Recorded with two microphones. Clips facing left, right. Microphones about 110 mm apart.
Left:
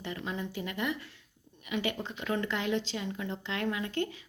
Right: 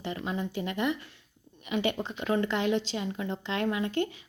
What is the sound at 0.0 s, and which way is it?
Speech, 25° right (ahead or behind).